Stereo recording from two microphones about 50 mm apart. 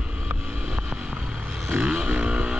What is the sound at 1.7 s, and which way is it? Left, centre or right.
Vehicle, right.